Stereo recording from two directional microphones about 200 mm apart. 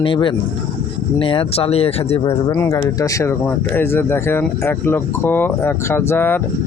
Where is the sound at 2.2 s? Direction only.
15° left (ahead or behind).